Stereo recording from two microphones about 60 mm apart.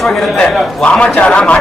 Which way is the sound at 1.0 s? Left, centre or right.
Centre.